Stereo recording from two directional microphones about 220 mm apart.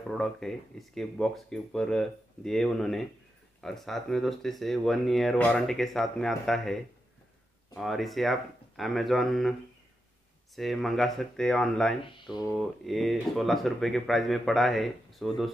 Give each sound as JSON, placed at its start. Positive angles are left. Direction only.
{"t": 0.1, "sound": "speech", "side_deg": 0}
{"t": 12.1, "sound": "speech", "side_deg": 20}
{"t": 12.4, "sound": "speech", "side_deg": 0}